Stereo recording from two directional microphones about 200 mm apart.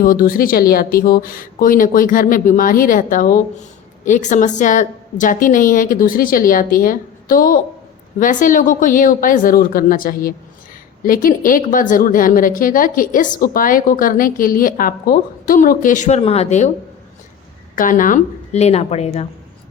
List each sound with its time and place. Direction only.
0.0 s a woman's voice: 45° left (ahead or behind)
17.7 s a woman's voice: 40° left (ahead or behind)